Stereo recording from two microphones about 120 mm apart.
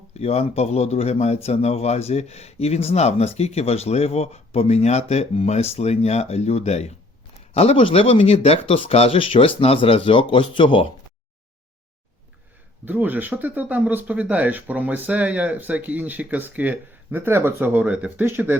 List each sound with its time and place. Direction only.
0.1 s speech: 60° left (ahead or behind); by 10.8 s 45° left (ahead or behind)
12.8 s speech: 15° right (ahead or behind)